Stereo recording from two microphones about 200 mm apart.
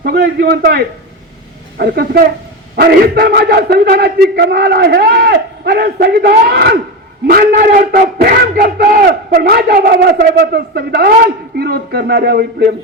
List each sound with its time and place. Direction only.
0.0 s a man's voice: 50° right (ahead or behind)